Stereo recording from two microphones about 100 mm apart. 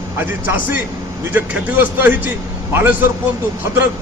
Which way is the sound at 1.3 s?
15° right (ahead or behind).